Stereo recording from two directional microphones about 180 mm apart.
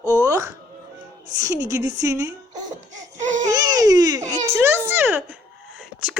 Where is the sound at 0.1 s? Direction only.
15° right (ahead or behind).